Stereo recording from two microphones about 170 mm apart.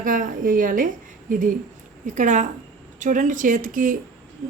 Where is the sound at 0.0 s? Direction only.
50° right (ahead or behind).